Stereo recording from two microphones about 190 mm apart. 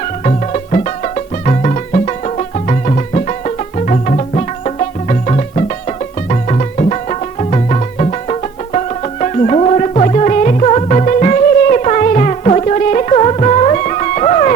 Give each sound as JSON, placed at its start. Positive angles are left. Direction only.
{"t": 0.0, "sound": "music", "side_deg": 35}